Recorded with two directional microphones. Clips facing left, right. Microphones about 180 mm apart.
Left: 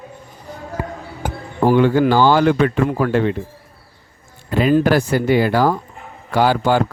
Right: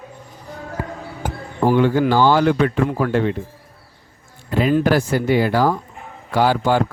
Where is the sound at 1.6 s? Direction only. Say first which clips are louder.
Left 2 dB; 65° left (ahead or behind).